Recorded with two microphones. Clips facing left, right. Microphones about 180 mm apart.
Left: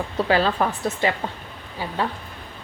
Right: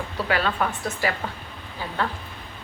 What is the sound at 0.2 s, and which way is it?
Speech, 30° left (ahead or behind).